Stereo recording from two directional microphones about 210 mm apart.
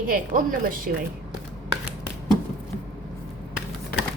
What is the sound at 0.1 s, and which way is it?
Speech, 40° right (ahead or behind).